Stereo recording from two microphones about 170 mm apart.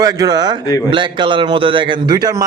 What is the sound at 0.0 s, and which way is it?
A man's voice, 20° right (ahead or behind).